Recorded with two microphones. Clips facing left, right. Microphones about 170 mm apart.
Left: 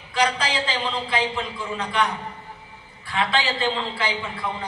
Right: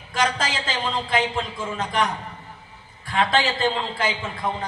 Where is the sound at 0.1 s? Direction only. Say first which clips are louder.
Left 1 dB; 45° right (ahead or behind).